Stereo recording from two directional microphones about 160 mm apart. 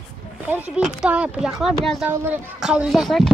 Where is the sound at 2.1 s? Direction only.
15° right (ahead or behind).